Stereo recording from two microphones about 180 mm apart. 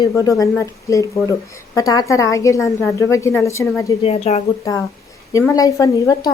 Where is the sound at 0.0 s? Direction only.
20° left (ahead or behind).